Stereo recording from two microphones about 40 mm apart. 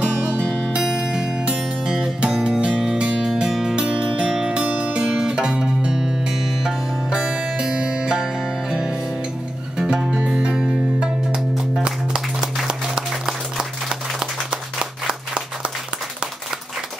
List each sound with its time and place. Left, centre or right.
0.0 s music: left
0.8 s music: centre
3.7 s music: right
13.6 s applause: centre
14.8 s applause: right